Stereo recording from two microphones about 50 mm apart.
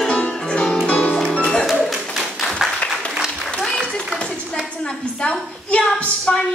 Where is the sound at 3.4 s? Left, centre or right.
Centre.